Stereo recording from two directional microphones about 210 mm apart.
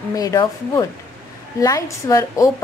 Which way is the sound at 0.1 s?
15° left (ahead or behind).